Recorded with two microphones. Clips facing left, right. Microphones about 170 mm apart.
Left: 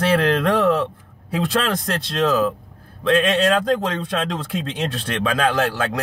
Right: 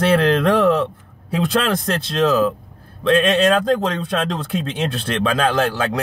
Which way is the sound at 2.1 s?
35° right (ahead or behind).